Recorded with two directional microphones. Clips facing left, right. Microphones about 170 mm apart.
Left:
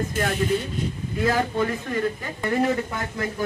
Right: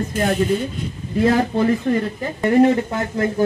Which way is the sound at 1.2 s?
30° right (ahead or behind).